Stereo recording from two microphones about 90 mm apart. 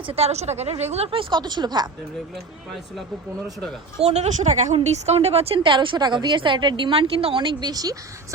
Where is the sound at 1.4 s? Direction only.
50° right (ahead or behind).